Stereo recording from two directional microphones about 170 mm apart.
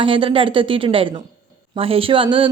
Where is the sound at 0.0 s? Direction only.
30° right (ahead or behind).